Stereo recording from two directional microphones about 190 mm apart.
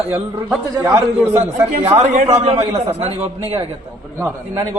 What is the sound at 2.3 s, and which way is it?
Speech, 35° right (ahead or behind).